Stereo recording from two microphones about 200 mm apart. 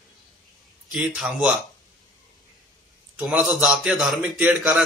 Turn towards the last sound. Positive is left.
turn(degrees=0)  # may be behind; listen again after turning